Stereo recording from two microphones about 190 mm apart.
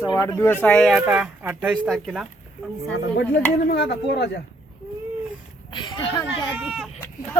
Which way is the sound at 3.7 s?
60° left (ahead or behind).